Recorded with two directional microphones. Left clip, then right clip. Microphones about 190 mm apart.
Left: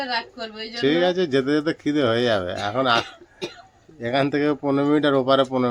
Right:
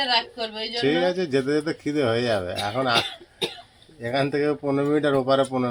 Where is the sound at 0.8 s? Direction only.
10° left (ahead or behind).